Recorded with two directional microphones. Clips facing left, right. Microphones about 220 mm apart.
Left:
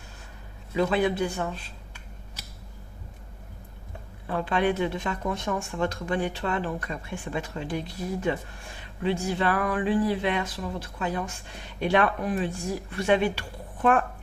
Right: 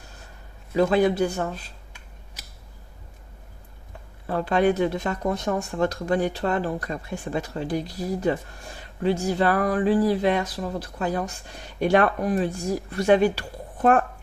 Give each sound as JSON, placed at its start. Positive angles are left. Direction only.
{"t": 0.8, "sound": "speech", "side_deg": -40}
{"t": 4.3, "sound": "speech", "side_deg": -40}